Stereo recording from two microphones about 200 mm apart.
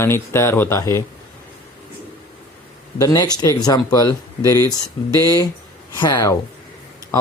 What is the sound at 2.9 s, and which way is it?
Speech, 20° left (ahead or behind).